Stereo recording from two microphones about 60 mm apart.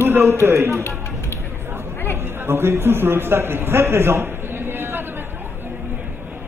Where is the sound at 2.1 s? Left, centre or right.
Right.